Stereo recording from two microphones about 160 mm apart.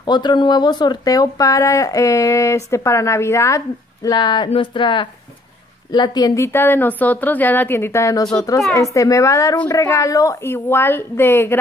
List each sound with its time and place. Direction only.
0.0 s a woman's voice: 25° left (ahead or behind)